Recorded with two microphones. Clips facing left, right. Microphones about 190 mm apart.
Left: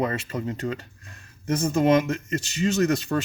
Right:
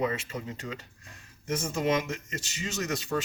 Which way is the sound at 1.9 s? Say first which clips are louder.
Left 8 dB; 60° left (ahead or behind).